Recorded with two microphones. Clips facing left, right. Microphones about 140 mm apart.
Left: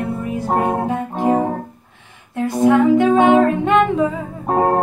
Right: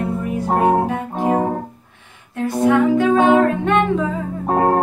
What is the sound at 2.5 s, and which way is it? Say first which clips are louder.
Music: left 2 dB; 15° left (ahead or behind).